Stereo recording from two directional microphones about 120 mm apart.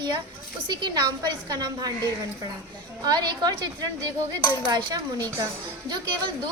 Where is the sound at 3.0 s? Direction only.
35° right (ahead or behind).